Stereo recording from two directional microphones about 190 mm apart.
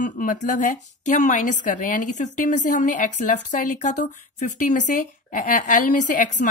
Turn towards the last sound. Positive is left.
turn(degrees=40)  # may be behind; listen again after turning